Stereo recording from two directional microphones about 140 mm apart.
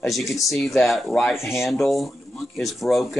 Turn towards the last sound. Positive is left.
turn(degrees=0)  # may be behind; listen again after turning